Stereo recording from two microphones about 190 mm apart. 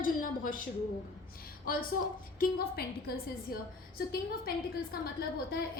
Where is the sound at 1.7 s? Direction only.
50° left (ahead or behind).